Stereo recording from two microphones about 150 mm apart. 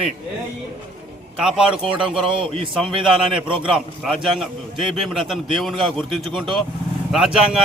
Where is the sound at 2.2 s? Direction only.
35° right (ahead or behind).